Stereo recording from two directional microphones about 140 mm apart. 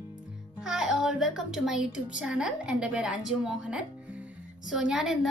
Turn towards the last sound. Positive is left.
turn(degrees=-5)  # may be behind; listen again after turning